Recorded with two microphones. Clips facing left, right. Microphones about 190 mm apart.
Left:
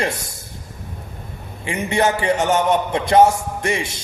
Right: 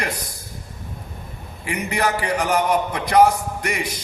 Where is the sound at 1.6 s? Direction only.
25° left (ahead or behind).